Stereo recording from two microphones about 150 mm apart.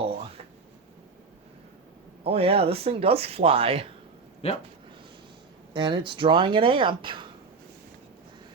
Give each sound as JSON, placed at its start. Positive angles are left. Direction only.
{"t": 2.2, "sound": "speech", "side_deg": -40}
{"t": 4.4, "sound": "speech", "side_deg": 40}
{"t": 5.7, "sound": "speech", "side_deg": -35}